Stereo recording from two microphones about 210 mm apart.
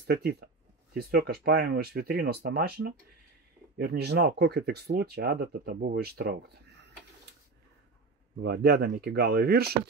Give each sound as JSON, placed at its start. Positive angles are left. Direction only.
{"t": 0.0, "sound": "speech", "side_deg": -50}
{"t": 8.4, "sound": "speech", "side_deg": -50}